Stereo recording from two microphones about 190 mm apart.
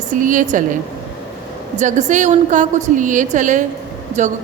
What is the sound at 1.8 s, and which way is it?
A woman's voice, 40° right (ahead or behind).